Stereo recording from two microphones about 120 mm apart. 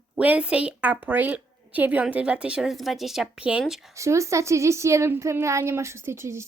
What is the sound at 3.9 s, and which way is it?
A woman's voice, 25° right (ahead or behind).